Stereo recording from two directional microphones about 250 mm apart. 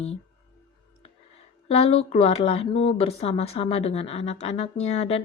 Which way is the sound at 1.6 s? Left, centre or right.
Left.